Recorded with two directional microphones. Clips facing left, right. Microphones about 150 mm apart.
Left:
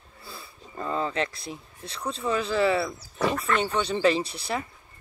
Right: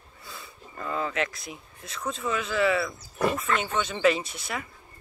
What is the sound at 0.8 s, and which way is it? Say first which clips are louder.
Speech: left 1 dB; 30° left (ahead or behind).